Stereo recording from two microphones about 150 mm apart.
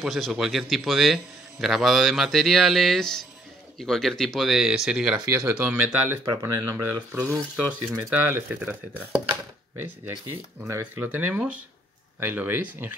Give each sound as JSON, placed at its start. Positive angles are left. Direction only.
{"t": 0.0, "sound": "a man's voice", "side_deg": 0}
{"t": 6.3, "sound": "speech", "side_deg": -20}
{"t": 7.1, "sound": "speech", "side_deg": -10}